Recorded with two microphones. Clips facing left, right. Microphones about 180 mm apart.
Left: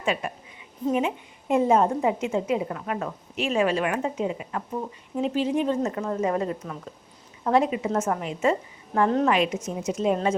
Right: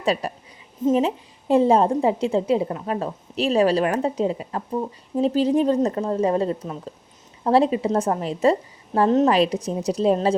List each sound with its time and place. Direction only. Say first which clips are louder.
0.0 s a woman's voice: right 4 dB; 35° right (ahead or behind)
9.3 s a woman's voice: right 4 dB; 35° right (ahead or behind)